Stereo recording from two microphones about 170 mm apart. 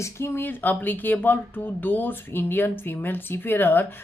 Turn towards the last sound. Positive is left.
turn(degrees=10)  # may be behind; listen again after turning